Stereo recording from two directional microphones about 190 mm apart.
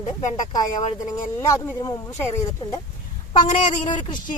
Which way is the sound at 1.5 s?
15° left (ahead or behind).